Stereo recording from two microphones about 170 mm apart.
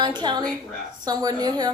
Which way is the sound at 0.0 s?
25° right (ahead or behind).